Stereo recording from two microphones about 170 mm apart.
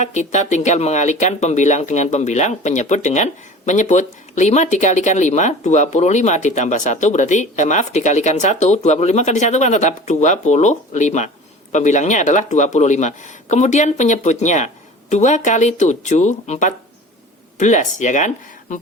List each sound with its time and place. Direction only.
0.0 s speech: 45° left (ahead or behind)